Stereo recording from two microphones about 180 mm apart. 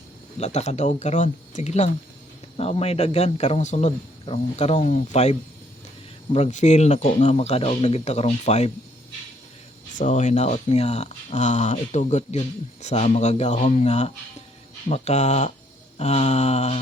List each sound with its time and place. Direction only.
0.3 s a man's voice: 40° left (ahead or behind)
10.0 s a man's voice: 45° left (ahead or behind)